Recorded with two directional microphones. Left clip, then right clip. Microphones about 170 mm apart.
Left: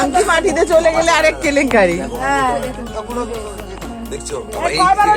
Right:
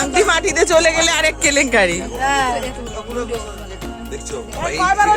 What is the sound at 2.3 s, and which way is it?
Speech, 80° right.